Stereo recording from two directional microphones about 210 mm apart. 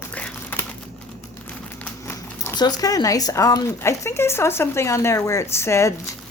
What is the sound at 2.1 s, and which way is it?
Speech, 15° left (ahead or behind).